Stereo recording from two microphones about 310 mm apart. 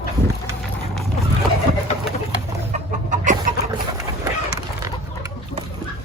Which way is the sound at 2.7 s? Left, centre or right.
Right.